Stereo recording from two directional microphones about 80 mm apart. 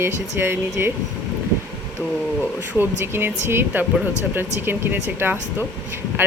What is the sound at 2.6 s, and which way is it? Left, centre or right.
Speech, right.